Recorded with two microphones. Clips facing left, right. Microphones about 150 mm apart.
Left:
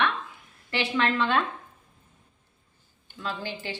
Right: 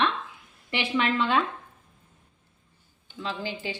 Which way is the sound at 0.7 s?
15° right (ahead or behind).